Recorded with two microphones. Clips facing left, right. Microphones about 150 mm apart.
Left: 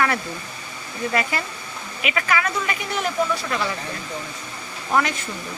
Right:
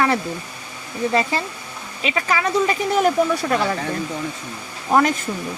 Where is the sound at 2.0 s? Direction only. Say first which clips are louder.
Right 2 dB; 30° right (ahead or behind).